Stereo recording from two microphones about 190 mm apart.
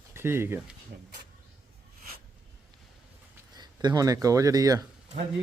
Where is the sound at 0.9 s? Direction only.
55° right (ahead or behind).